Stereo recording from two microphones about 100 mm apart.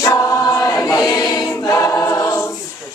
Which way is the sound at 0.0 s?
35° left (ahead or behind).